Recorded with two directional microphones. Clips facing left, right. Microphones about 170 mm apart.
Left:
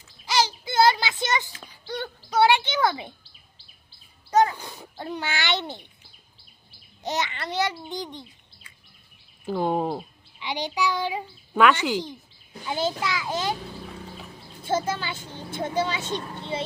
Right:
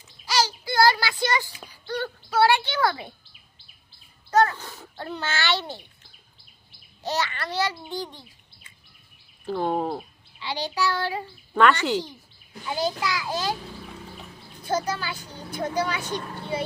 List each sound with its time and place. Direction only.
0.3 s child singing: 20° left (ahead or behind)
1.9 s bird: 20° left (ahead or behind)
4.3 s a sound: 15° left (ahead or behind)
7.0 s speech: 20° left (ahead or behind)
9.5 s a child's voice: 10° left (ahead or behind)
12.6 s speech: 20° left (ahead or behind)
14.6 s speech: 25° left (ahead or behind)